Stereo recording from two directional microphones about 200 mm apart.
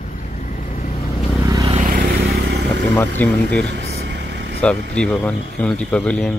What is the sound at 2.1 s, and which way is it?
Vehicle, 55° right (ahead or behind).